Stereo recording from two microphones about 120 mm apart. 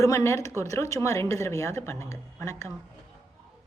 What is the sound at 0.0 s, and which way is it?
A woman's voice, 25° left (ahead or behind).